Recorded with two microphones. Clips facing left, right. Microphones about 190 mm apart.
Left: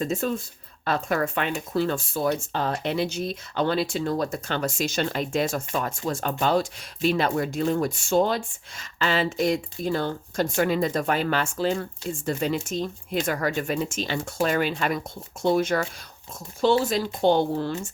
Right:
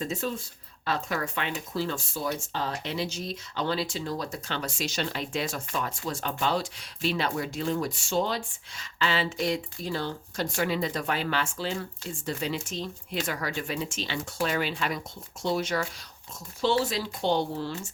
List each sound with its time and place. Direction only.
0.0 s speech: 50° left (ahead or behind)